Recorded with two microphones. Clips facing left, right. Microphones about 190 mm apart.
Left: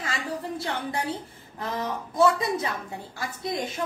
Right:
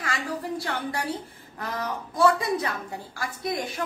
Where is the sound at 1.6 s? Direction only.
25° left (ahead or behind).